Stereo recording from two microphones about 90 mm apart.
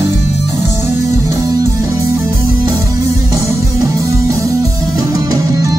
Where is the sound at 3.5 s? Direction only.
35° right (ahead or behind).